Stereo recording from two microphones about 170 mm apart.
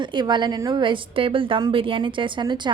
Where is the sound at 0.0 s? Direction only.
25° right (ahead or behind).